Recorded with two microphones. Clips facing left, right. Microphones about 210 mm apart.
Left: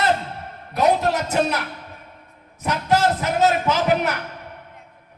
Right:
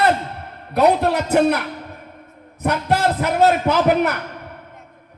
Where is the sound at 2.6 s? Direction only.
60° right (ahead or behind).